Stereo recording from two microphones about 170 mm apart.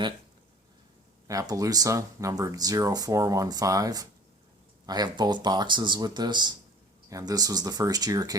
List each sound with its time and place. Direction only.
1.3 s speech: 20° right (ahead or behind)